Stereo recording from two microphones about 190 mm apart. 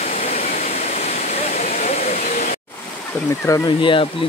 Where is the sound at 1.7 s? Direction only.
35° left (ahead or behind).